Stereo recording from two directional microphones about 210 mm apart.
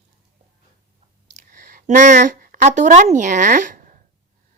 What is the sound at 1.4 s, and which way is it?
A woman's voice, 40° right (ahead or behind).